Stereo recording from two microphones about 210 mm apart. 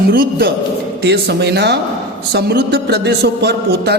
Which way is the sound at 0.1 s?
45° right (ahead or behind).